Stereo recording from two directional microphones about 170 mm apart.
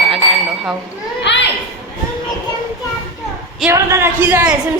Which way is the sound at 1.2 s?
90° left.